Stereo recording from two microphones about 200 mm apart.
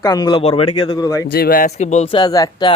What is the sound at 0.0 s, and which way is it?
Speech, 20° left (ahead or behind).